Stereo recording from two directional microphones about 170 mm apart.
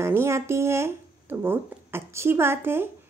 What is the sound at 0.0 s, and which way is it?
Speech, 15° right (ahead or behind).